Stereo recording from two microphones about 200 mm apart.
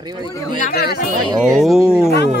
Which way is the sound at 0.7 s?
50° left (ahead or behind).